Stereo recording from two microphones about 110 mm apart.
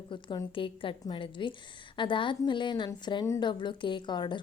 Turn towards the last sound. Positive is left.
turn(degrees=45)  # may be behind; listen again after turning